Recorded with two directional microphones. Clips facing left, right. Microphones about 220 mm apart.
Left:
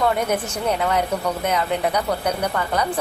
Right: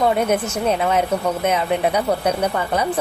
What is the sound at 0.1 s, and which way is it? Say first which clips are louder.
A woman's voice: right 3 dB; 20° right (ahead or behind).